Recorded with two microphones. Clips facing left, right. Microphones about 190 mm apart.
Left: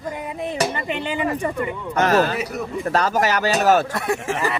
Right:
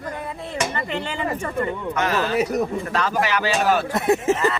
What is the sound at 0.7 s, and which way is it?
Speech, 20° left (ahead or behind).